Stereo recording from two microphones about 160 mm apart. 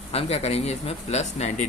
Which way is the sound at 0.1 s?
40° left (ahead or behind).